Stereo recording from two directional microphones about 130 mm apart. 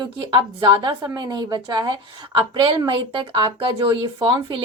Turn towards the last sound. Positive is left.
turn(degrees=-40)  # may be behind; listen again after turning